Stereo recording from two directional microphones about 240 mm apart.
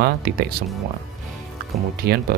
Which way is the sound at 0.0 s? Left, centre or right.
Right.